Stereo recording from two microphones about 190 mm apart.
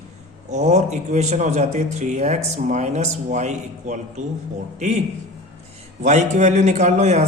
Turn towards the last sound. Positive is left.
turn(degrees=-35)  # may be behind; listen again after turning